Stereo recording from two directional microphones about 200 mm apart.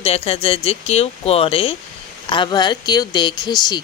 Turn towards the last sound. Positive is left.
turn(degrees=20)  # may be behind; listen again after turning